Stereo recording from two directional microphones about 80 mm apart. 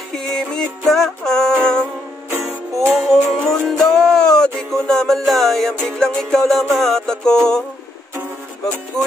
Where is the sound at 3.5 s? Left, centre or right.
Centre.